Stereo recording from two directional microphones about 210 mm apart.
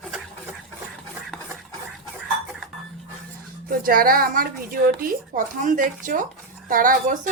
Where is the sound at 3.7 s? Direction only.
45° right (ahead or behind).